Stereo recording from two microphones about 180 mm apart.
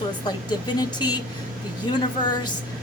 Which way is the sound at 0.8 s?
25° left (ahead or behind).